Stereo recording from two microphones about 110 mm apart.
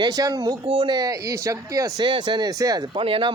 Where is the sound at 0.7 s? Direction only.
50° right (ahead or behind).